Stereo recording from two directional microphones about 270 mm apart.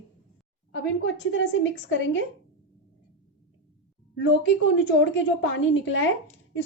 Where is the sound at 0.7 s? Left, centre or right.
Left.